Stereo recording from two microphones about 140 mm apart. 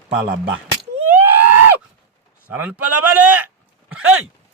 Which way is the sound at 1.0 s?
10° right (ahead or behind).